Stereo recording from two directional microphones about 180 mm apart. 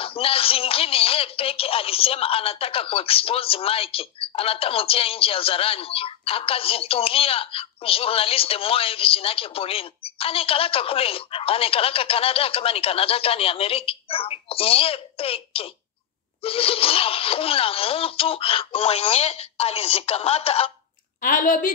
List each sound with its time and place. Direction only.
0.0 s speech: 30° left (ahead or behind)
21.2 s a woman's voice: 50° left (ahead or behind)